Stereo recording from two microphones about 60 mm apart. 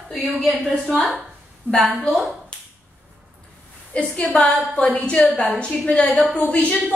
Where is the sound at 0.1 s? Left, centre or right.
Centre.